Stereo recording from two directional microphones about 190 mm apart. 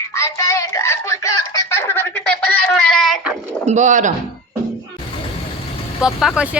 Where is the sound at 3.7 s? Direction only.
40° right (ahead or behind).